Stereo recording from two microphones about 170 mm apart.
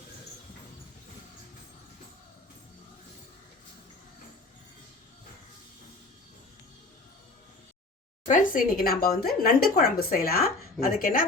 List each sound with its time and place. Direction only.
8.3 s speech: 50° left (ahead or behind)